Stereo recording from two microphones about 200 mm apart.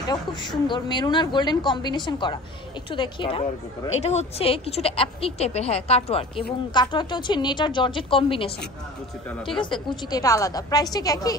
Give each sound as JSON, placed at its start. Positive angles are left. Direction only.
{"t": 0.1, "sound": "a woman's voice", "side_deg": 20}
{"t": 9.6, "sound": "a woman's voice", "side_deg": 25}